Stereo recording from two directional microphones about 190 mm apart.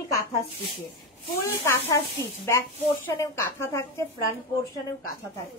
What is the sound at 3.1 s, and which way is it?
Speech, 10° left (ahead or behind).